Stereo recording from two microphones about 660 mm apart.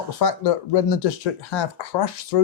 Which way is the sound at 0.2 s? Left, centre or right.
Left.